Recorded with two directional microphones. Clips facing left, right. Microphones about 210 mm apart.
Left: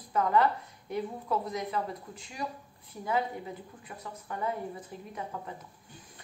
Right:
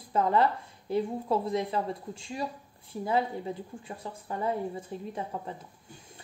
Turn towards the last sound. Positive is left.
turn(degrees=-25)  # may be behind; listen again after turning